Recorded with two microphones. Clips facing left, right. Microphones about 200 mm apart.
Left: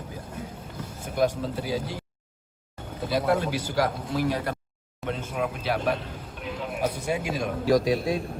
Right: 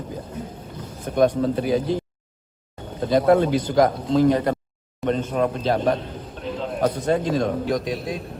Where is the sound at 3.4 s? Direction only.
10° left (ahead or behind).